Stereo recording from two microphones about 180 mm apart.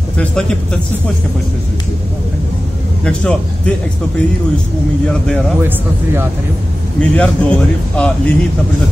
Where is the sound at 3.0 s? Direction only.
5° left (ahead or behind).